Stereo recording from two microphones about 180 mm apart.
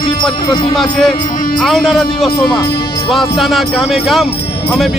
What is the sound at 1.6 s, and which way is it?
Speech, centre (ahead or behind).